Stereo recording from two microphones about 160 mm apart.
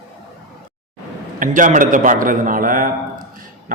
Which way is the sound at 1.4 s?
55° right (ahead or behind).